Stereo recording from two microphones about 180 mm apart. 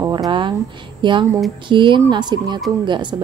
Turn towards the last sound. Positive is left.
turn(degrees=-25)  # may be behind; listen again after turning